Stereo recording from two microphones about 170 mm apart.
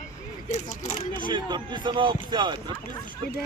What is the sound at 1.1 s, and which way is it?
Speech, 30° right (ahead or behind).